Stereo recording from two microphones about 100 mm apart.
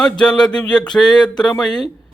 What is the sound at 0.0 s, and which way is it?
Speech, 5° left (ahead or behind).